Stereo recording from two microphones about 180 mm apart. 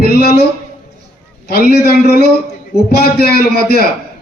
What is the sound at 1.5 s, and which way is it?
Speech, 60° left (ahead or behind).